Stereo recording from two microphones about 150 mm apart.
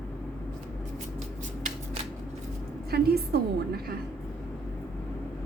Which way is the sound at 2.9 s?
90° right.